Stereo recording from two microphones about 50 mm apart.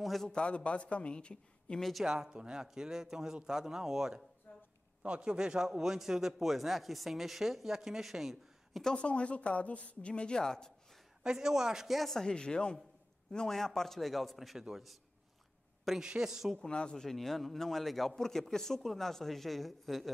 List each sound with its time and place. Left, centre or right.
0.0 s a sound: centre
0.3 s speech: left
1.8 s a man's voice: centre
2.0 s a man's voice: centre
4.5 s a sound: left
5.0 s a man's voice: right; by 8.8 s centre
8.8 s speech: left
11.2 s a man's voice: centre
16.0 s a man's voice: centre
16.5 s a man's voice: centre